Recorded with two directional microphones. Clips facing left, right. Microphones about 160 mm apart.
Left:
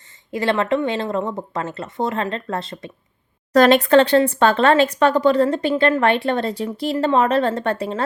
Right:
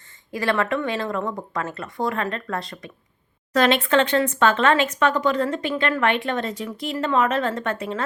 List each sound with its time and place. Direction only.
0.3 s speech: 25° left (ahead or behind)
3.5 s speech: 40° left (ahead or behind)